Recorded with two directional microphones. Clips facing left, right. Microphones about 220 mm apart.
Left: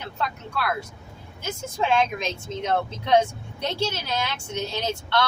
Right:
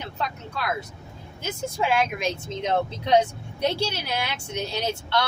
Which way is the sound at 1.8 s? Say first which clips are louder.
Left 1 dB; 10° right (ahead or behind).